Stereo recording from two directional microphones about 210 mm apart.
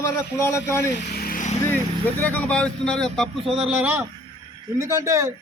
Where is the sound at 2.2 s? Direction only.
5° left (ahead or behind).